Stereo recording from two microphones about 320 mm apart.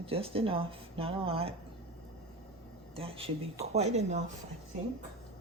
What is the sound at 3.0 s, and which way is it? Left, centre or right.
Speech, centre.